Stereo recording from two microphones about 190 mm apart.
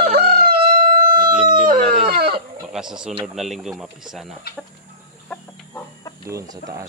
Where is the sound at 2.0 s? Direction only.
55° right (ahead or behind).